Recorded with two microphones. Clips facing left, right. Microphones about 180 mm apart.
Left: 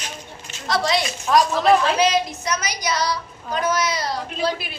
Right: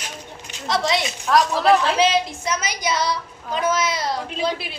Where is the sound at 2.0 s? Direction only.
25° right (ahead or behind).